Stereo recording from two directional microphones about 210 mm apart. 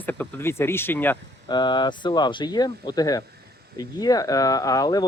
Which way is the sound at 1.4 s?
20° left (ahead or behind).